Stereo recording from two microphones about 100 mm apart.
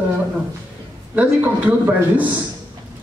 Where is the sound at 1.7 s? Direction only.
15° right (ahead or behind).